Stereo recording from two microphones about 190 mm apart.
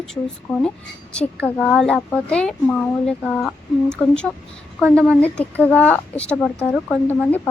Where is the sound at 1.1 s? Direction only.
5° left (ahead or behind).